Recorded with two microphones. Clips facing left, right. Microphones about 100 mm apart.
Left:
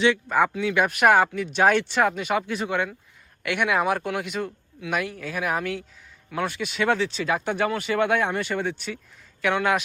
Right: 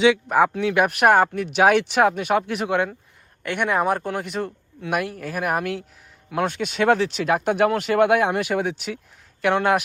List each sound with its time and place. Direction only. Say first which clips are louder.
0.0 s speech: right 4 dB; 90° right
0.4 s speech: right 2 dB; 55° right (ahead or behind)
1.5 s speech: right 3 dB; 70° right (ahead or behind)
3.4 s speech: right 1 dB; 40° right (ahead or behind); by 5.8 s 55° right (ahead or behind)
6.3 s speech: right 4 dB; 65° right (ahead or behind)